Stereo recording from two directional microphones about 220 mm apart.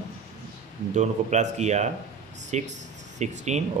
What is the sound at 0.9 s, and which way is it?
Speech, 30° right (ahead or behind).